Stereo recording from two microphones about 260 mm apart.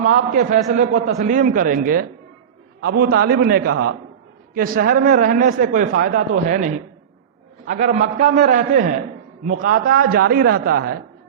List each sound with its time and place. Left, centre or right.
0.0 s speech: right
7.7 s a man's voice: right